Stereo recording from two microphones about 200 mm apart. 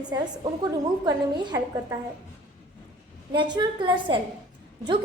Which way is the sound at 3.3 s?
20° right (ahead or behind).